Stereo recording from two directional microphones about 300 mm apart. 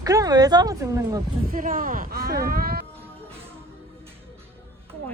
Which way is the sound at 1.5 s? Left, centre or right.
Right.